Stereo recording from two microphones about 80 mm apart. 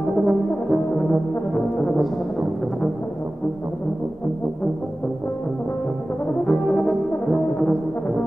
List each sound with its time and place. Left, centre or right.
0.1 s brass instrument: centre
6.4 s brass instrument: centre